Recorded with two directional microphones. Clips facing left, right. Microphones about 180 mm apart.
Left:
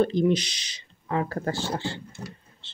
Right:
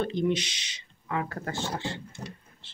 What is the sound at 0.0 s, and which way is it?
Speech, 35° left (ahead or behind).